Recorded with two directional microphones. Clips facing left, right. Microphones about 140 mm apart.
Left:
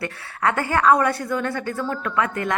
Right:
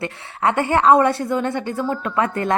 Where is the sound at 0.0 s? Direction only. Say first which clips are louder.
Right 2 dB; 25° right (ahead or behind).